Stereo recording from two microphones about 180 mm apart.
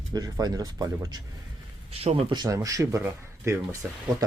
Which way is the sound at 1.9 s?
35° right (ahead or behind).